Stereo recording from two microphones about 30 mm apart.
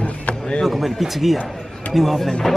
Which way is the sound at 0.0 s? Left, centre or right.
Left.